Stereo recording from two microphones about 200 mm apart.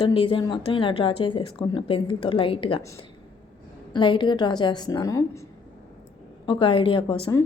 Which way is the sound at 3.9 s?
25° left (ahead or behind).